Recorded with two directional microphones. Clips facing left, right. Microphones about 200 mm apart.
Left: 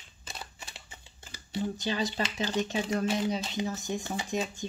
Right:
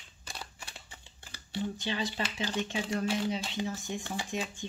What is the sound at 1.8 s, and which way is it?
Speech, 40° left (ahead or behind).